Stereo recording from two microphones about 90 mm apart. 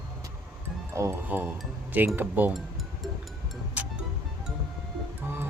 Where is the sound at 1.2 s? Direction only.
20° right (ahead or behind).